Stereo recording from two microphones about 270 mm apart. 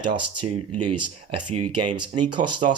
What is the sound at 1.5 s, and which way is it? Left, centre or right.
Speech, right.